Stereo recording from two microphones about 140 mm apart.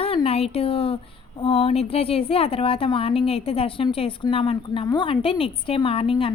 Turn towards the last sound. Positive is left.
turn(degrees=40)  # may be behind; listen again after turning